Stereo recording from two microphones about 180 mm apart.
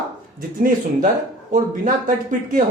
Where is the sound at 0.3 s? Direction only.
50° right (ahead or behind).